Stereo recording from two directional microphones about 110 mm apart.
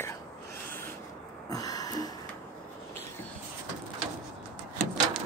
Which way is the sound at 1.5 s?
35° left (ahead or behind).